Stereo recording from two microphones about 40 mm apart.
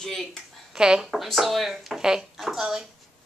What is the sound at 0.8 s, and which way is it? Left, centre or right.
Speech, centre.